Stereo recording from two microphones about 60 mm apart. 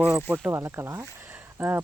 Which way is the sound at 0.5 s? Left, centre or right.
Right.